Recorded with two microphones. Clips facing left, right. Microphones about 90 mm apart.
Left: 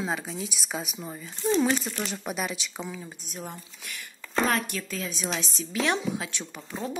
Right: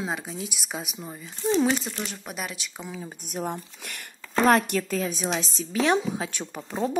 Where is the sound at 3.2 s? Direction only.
55° right (ahead or behind).